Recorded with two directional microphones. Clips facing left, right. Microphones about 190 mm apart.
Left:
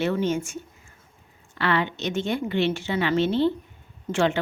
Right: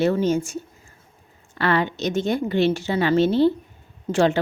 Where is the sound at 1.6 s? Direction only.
40° right (ahead or behind).